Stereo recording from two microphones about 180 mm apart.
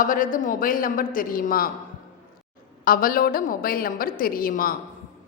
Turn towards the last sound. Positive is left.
turn(degrees=50)  # may be behind; listen again after turning